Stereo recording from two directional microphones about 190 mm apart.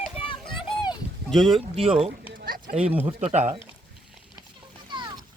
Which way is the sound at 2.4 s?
50° right (ahead or behind).